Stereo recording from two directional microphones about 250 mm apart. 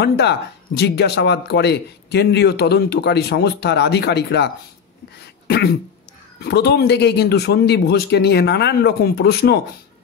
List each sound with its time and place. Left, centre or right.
0.0 s speech: left
6.4 s a man's voice: left